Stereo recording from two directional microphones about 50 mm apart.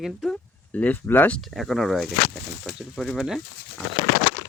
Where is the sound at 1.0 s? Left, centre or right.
Left.